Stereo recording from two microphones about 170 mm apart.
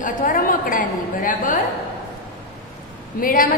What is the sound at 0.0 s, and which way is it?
A woman's voice, 55° left (ahead or behind).